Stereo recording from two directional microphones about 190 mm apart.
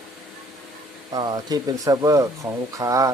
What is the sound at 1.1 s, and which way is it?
Speech, 20° right (ahead or behind).